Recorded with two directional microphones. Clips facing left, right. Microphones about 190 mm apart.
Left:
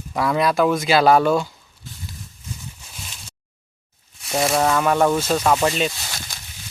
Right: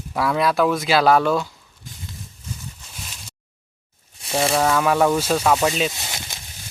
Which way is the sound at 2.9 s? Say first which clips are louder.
Right 1 dB; centre (ahead or behind).